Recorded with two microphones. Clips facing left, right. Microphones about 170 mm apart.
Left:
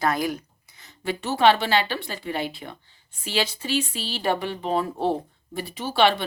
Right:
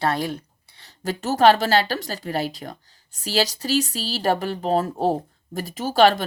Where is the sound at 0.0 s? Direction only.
30° right (ahead or behind).